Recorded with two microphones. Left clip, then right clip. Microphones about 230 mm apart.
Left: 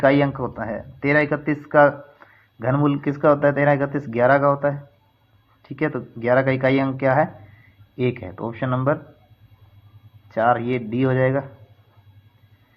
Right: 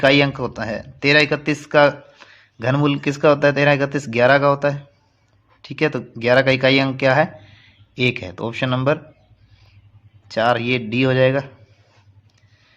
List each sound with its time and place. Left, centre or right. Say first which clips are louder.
0.0 s speech: right 3 dB; right
10.2 s speech: right 1 dB; right